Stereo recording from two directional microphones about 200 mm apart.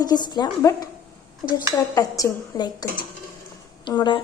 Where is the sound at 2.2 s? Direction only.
20° left (ahead or behind).